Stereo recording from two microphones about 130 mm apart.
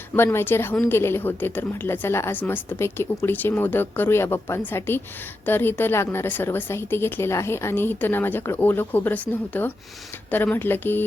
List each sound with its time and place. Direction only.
0.2 s a woman's voice: 20° left (ahead or behind)